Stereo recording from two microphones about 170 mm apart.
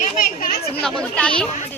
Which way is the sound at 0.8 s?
5° left (ahead or behind).